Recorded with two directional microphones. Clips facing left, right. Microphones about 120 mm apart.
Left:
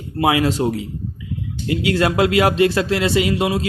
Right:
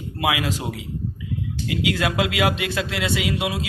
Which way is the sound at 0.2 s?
35° left (ahead or behind).